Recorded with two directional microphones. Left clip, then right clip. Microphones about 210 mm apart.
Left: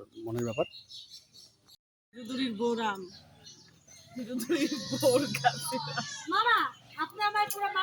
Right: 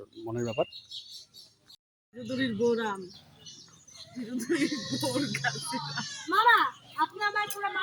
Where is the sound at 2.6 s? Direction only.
10° right (ahead or behind).